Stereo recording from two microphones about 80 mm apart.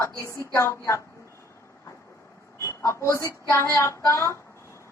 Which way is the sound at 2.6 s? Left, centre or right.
Left.